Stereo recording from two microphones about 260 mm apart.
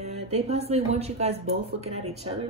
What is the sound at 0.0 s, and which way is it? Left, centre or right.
Speech, right.